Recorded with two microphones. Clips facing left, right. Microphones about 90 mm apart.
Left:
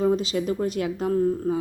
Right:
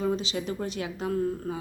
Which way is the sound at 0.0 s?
45° left (ahead or behind).